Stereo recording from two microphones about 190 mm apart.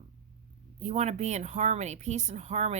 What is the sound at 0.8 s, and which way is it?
A woman's voice, 35° right (ahead or behind).